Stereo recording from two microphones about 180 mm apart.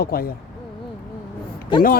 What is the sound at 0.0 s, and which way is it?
Speech, 55° left (ahead or behind).